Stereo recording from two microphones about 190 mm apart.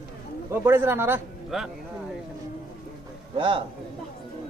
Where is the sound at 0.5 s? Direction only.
10° right (ahead or behind).